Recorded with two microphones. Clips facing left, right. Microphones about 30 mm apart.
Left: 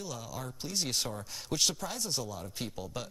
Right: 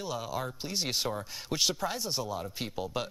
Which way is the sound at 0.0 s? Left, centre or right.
Right.